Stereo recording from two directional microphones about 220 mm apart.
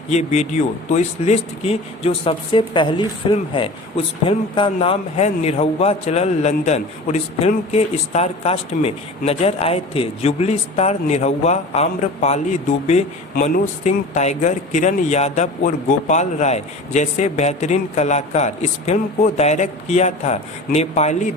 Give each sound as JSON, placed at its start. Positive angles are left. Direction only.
{"t": 0.1, "sound": "speech", "side_deg": 30}